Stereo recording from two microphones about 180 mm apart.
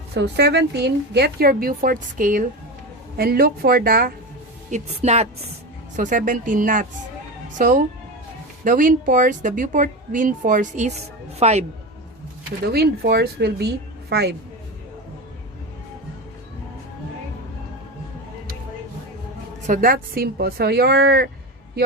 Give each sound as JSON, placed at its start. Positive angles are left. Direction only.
{"t": 0.1, "sound": "a woman's voice", "side_deg": -65}
{"t": 4.7, "sound": "speech", "side_deg": -40}
{"t": 12.6, "sound": "a woman's voice", "side_deg": -60}
{"t": 19.6, "sound": "a woman's voice", "side_deg": -50}